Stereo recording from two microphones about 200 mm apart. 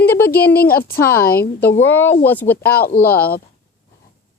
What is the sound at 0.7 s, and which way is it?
Speech, 50° left (ahead or behind).